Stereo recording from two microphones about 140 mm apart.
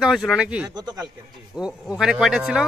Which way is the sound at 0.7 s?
30° right (ahead or behind).